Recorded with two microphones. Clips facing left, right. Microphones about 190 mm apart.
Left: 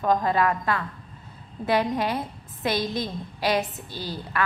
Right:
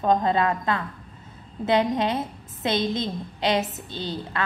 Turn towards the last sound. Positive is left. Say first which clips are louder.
# even
turn(degrees=-25)  # may be behind; listen again after turning